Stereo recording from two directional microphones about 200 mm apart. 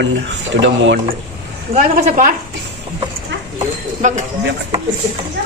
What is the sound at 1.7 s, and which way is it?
Speech, 40° right (ahead or behind).